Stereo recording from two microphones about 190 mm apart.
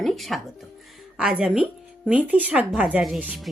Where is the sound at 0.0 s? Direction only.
Centre (ahead or behind).